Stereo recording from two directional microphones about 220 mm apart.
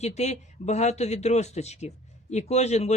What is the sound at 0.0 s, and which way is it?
A woman's voice, 30° left (ahead or behind).